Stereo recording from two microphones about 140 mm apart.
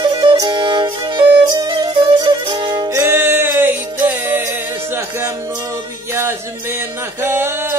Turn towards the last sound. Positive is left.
turn(degrees=-15)  # may be behind; listen again after turning